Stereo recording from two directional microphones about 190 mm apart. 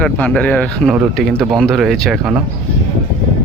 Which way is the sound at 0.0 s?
5° left (ahead or behind).